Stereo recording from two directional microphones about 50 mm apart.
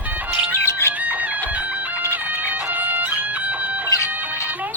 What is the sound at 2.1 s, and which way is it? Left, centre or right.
Music, right.